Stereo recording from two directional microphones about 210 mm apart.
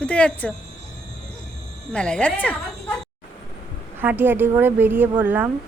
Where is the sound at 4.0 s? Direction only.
10° right (ahead or behind).